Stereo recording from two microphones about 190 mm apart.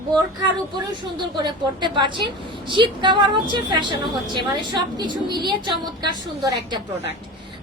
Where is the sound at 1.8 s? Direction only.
25° right (ahead or behind).